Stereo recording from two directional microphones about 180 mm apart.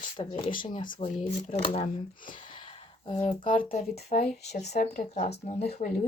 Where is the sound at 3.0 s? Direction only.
30° left (ahead or behind).